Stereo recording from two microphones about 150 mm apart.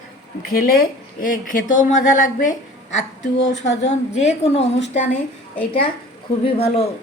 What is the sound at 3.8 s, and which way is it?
A woman's voice, 50° left (ahead or behind).